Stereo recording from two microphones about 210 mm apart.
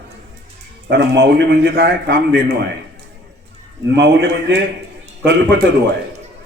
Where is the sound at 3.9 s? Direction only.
55° right (ahead or behind).